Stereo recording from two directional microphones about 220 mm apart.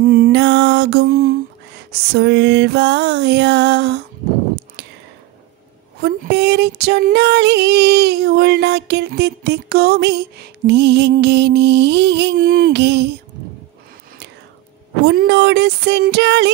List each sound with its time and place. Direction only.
0.0 s mantra: 45° right (ahead or behind)
1.9 s female singing: 50° right (ahead or behind)
5.9 s female singing: 45° right (ahead or behind)
15.0 s female singing: 50° right (ahead or behind)